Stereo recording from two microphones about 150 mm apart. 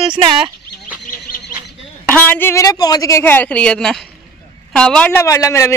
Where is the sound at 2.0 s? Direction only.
10° left (ahead or behind).